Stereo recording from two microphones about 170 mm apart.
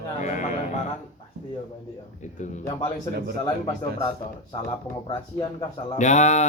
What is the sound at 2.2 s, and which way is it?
Speech, 45° left (ahead or behind).